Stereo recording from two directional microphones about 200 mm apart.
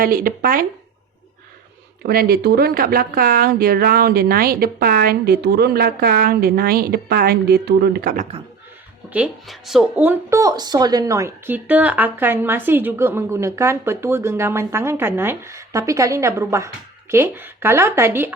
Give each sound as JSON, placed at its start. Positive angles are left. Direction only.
{"t": 0.0, "sound": "speech", "side_deg": -45}
{"t": 2.0, "sound": "speech", "side_deg": -50}
{"t": 9.1, "sound": "speech", "side_deg": -5}